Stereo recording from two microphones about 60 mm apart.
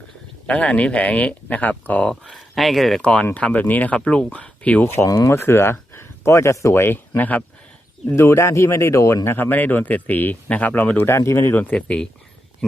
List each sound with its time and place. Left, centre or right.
0.4 s speech: centre
2.3 s speech: centre
3.0 s speech: centre
5.0 s speech: left
7.2 s speech: left
8.1 s speech: left
9.2 s speech: left
11.3 s speech: left
11.6 s speech: left